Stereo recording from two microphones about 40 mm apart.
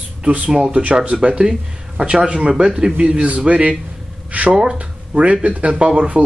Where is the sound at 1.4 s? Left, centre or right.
Centre.